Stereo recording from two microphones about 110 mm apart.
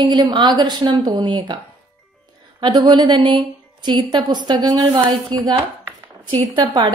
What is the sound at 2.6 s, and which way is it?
A woman's voice, 40° right (ahead or behind).